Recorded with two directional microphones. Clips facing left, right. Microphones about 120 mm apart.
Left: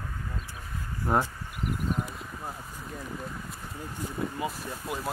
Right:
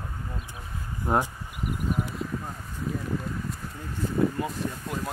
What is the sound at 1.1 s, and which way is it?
Speech, 15° right (ahead or behind).